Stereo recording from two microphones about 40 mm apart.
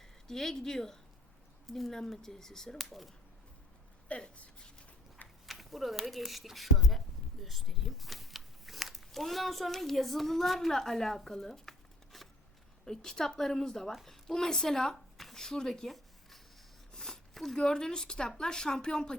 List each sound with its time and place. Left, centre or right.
0.0 s speech: centre
2.7 s speech: centre
4.1 s speech: left
5.5 s speech: centre
12.8 s a woman's voice: centre
16.9 s a sound: centre
17.6 s speech: centre